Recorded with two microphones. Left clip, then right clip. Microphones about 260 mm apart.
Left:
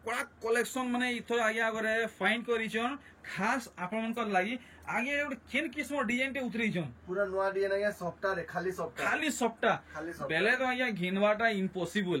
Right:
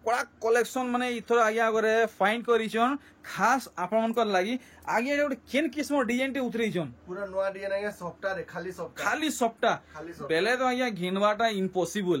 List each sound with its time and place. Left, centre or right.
0.0 s speech: centre